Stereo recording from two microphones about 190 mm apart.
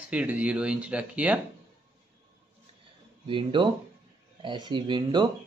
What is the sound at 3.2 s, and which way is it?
Speech, 25° right (ahead or behind).